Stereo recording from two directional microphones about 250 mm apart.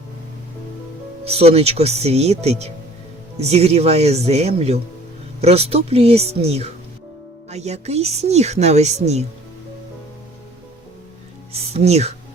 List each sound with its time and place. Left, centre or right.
1.2 s a woman's voice: right
11.7 s a woman's voice: right